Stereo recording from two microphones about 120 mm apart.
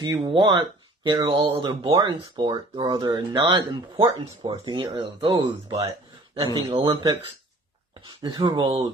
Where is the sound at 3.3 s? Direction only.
40° right (ahead or behind).